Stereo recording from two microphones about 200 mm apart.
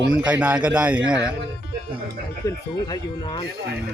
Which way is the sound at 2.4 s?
20° left (ahead or behind).